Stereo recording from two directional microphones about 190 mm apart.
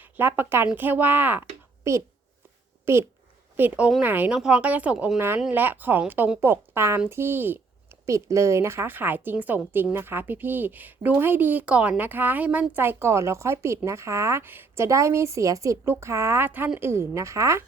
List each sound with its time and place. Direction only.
0.0 s speech: 10° right (ahead or behind)